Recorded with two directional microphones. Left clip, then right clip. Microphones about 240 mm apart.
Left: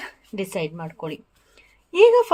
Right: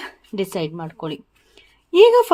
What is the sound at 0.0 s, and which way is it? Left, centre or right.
A woman's voice, right.